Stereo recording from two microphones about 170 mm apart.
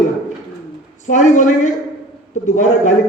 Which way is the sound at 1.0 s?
45° left (ahead or behind).